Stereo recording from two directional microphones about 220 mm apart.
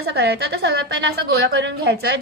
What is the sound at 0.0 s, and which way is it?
A woman's voice, 50° right (ahead or behind).